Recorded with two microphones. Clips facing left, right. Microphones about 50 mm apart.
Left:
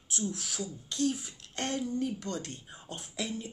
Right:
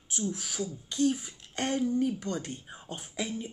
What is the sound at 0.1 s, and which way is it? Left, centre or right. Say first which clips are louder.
Speech: right 2 dB; centre.